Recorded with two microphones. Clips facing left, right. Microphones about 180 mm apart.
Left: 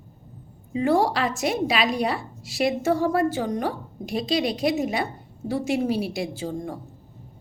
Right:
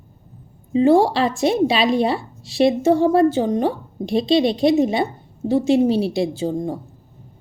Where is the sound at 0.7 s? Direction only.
25° right (ahead or behind).